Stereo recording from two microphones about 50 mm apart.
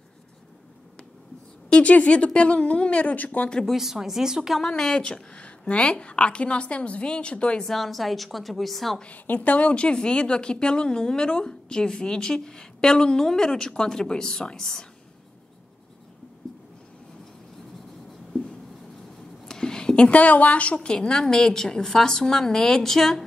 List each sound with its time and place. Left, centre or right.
1.7 s a woman's voice: left
3.6 s speech: centre
4.6 s a woman's voice: centre
7.6 s a woman's voice: centre
9.0 s speech: left; by 14.9 s centre
19.4 s a sound: centre
20.1 s speech: left; by 23.2 s centre